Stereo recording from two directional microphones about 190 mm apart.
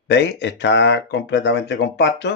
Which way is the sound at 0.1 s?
65° left (ahead or behind).